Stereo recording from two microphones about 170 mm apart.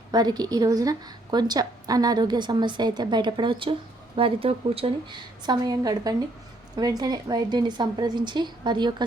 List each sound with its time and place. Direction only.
0.1 s a woman's voice: 25° right (ahead or behind)